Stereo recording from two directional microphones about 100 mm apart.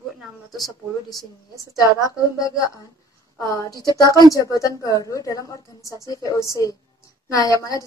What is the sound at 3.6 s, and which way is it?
A woman's voice, 40° left (ahead or behind).